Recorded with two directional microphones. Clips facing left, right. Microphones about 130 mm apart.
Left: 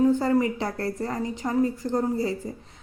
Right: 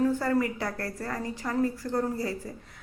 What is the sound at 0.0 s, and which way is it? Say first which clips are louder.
A woman's voice: left 5 dB; 20° left (ahead or behind).